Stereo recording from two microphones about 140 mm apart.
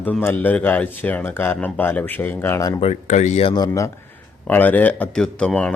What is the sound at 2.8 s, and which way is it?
Speech, 55° left (ahead or behind).